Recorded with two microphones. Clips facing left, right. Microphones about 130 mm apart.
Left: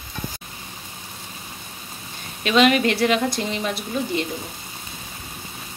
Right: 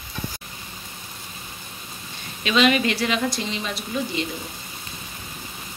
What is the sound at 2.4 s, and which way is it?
A woman's voice, 50° left (ahead or behind).